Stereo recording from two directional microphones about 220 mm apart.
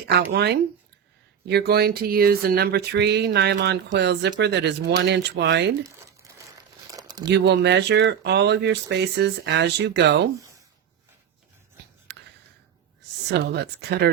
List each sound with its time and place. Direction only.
0.0 s speech: 50° right (ahead or behind)
6.9 s crumpling: 15° right (ahead or behind)
7.3 s speech: 50° right (ahead or behind)
12.1 s a sound: 50° right (ahead or behind)
13.2 s speech: 50° right (ahead or behind)